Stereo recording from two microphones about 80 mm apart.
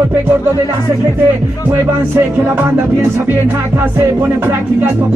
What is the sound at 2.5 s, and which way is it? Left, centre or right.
Music, right.